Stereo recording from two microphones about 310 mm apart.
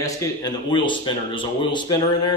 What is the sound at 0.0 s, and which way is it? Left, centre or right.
Speech, centre.